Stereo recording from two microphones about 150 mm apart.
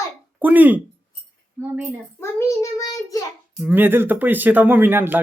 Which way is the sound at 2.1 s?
20° left (ahead or behind).